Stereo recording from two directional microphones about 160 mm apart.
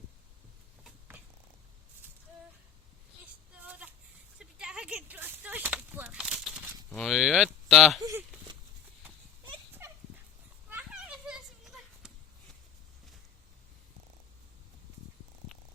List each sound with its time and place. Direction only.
3.6 s a sound: 10° right (ahead or behind)
6.9 s speech: centre (ahead or behind)
9.8 s dog: 15° right (ahead or behind)
10.7 s children playing: 5° right (ahead or behind)